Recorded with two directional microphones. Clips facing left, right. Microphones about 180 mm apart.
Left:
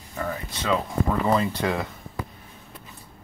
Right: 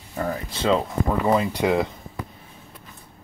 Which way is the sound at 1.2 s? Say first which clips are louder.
Right 4 dB; 15° right (ahead or behind).